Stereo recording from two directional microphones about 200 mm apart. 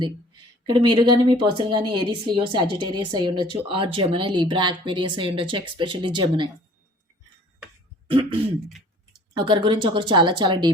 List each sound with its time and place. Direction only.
0.6 s speech: 25° right (ahead or behind)
9.4 s speech: 20° right (ahead or behind)